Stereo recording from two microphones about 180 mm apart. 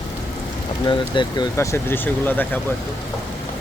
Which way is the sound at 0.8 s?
25° left (ahead or behind).